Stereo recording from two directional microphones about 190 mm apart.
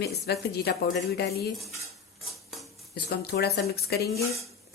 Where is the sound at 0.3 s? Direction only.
55° left (ahead or behind).